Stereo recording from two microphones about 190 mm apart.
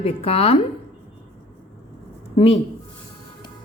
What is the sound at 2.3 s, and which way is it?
Speech, 35° left (ahead or behind).